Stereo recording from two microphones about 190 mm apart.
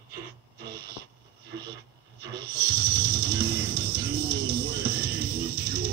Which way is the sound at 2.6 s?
55° right (ahead or behind).